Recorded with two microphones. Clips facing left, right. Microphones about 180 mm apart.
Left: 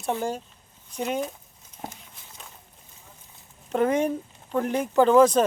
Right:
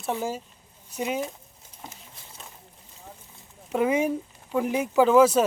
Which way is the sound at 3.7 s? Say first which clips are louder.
Left 1 dB; 10° right (ahead or behind).